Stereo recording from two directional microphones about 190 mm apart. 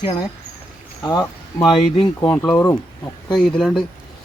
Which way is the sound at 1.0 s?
20° left (ahead or behind).